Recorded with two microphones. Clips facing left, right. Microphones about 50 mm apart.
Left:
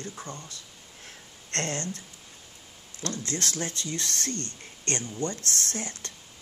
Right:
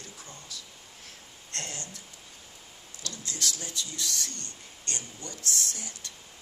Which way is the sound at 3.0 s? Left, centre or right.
Left.